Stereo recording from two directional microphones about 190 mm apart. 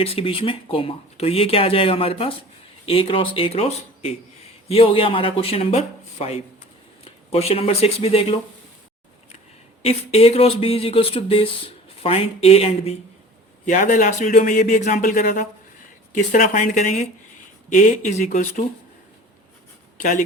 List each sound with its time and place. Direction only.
0.0 s speech: 30° left (ahead or behind)
9.8 s speech: 30° left (ahead or behind)
20.0 s speech: 40° left (ahead or behind)